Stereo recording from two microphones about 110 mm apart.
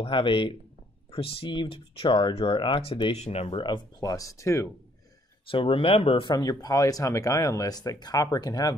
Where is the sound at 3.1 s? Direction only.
70° left (ahead or behind).